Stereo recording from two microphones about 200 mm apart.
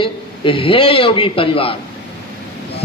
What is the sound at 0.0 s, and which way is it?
A man's voice, 25° left (ahead or behind).